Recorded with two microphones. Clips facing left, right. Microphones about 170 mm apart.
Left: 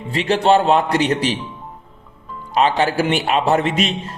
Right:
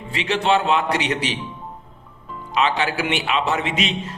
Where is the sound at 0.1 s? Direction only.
45° left (ahead or behind).